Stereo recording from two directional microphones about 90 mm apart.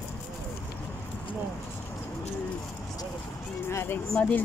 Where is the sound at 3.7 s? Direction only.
25° left (ahead or behind).